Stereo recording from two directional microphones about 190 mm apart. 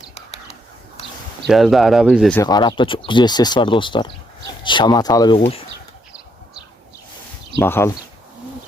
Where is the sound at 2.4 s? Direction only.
20° left (ahead or behind).